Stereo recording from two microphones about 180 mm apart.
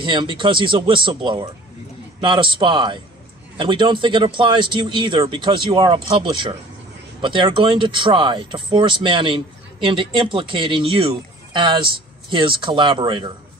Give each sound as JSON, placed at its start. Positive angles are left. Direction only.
{"t": 0.0, "sound": "speech", "side_deg": -30}